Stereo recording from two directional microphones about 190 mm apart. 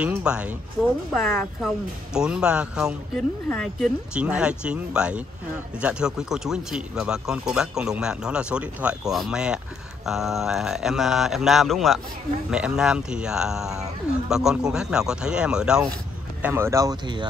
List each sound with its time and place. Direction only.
0.0 s speech: 5° right (ahead or behind); by 17.3 s 20° right (ahead or behind)